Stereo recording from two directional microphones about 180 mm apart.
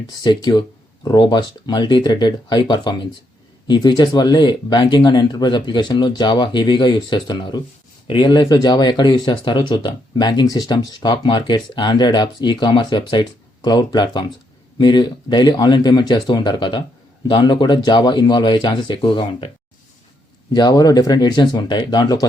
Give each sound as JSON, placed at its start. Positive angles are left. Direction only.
{"t": 0.2, "sound": "speech", "side_deg": 25}
{"t": 20.5, "sound": "speech", "side_deg": 20}